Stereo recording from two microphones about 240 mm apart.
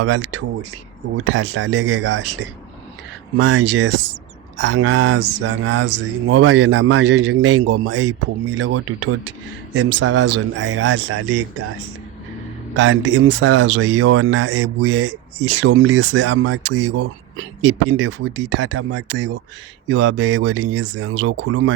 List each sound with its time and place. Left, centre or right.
0.0 s speech: right
1.2 s speech: right
12.7 s speech: right